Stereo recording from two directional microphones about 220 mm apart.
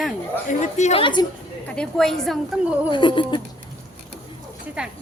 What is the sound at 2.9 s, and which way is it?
Speech, 20° left (ahead or behind).